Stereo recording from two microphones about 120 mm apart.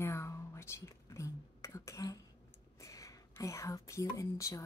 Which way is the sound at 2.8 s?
25° left (ahead or behind).